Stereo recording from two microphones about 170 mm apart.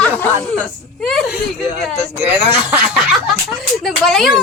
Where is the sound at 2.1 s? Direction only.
15° right (ahead or behind).